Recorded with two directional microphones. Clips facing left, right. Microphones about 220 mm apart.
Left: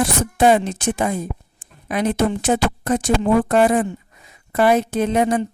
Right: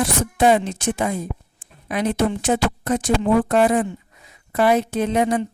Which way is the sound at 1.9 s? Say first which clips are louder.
Left 1 dB; 50° left (ahead or behind).